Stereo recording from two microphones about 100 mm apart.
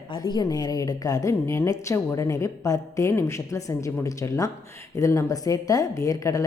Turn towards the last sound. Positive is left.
turn(degrees=35)  # may be behind; listen again after turning